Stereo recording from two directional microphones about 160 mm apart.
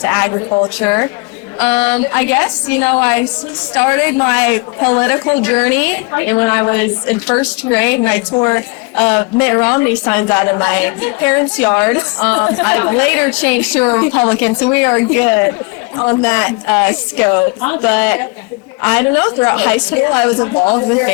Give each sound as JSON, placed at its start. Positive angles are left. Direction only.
{"t": 0.0, "sound": "a woman's voice", "side_deg": 10}